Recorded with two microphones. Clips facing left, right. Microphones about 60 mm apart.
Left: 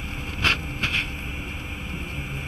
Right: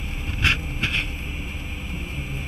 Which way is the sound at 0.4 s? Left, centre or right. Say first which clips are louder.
Right 1 dB; centre.